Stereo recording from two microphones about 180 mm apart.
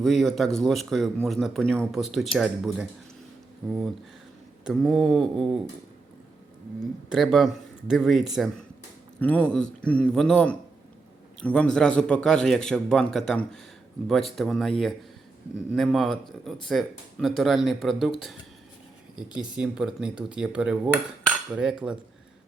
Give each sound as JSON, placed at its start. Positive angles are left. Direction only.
{"t": 0.0, "sound": "speech", "side_deg": 0}
{"t": 7.1, "sound": "a man's voice", "side_deg": 0}
{"t": 19.4, "sound": "speech", "side_deg": -5}
{"t": 21.2, "sound": "cutlery", "side_deg": 0}